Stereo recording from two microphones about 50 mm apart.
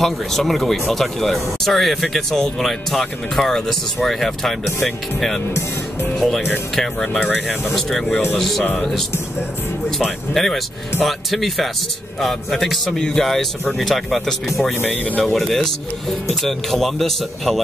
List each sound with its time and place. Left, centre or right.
0.0 s speech: centre
7.2 s speech: centre
7.7 s speech: centre
10.3 s speech: centre
14.8 s speech: left
15.3 s speech: centre